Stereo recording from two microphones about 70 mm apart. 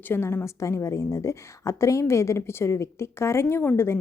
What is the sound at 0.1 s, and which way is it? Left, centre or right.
A woman's voice, left.